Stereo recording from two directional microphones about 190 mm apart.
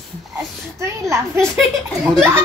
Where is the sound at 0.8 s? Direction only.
15° right (ahead or behind).